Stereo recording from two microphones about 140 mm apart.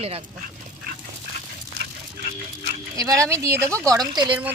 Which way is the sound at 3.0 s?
25° right (ahead or behind).